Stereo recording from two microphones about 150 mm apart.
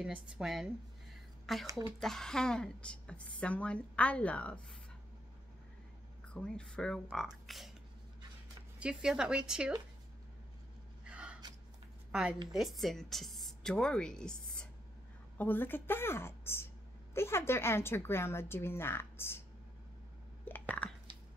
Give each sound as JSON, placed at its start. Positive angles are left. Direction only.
{"t": 0.0, "sound": "a woman's voice", "side_deg": -5}
{"t": 1.7, "sound": "speech", "side_deg": -25}
{"t": 2.0, "sound": "a woman's voice", "side_deg": 5}
{"t": 6.2, "sound": "a woman's voice", "side_deg": 5}
{"t": 8.7, "sound": "a woman's voice", "side_deg": -5}
{"t": 11.1, "sound": "gasp", "side_deg": -10}
{"t": 12.1, "sound": "a woman's voice", "side_deg": -5}
{"t": 20.4, "sound": "a sound", "side_deg": 10}